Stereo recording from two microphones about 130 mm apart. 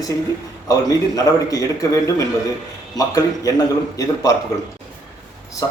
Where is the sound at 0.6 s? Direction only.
25° left (ahead or behind).